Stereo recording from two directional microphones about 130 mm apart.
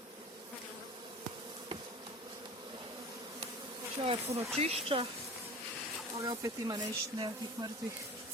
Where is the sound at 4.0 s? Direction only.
50° right (ahead or behind).